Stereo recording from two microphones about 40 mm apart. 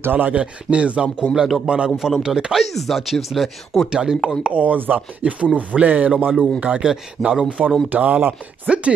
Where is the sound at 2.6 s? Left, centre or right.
Centre.